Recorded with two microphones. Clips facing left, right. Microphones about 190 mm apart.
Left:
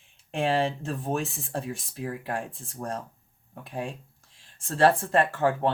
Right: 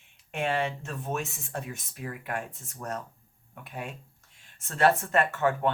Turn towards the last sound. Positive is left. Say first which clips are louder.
# left 2 dB
turn(degrees=30)  # may be behind; listen again after turning